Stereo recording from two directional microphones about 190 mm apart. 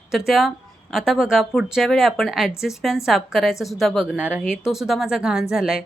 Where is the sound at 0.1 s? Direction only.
Centre (ahead or behind).